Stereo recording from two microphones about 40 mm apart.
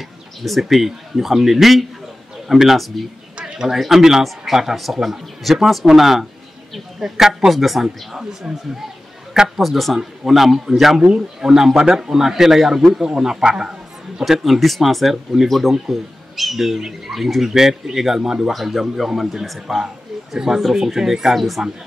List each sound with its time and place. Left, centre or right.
0.4 s speech: centre
3.3 s a sound: right
3.6 s a man's voice: centre
9.6 s a man's voice: centre
13.5 s music: centre
14.2 s a man's voice: centre
18.5 s speech: centre
20.3 s a man's voice: centre